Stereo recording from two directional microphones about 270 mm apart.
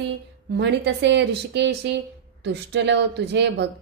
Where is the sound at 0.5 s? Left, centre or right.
Right.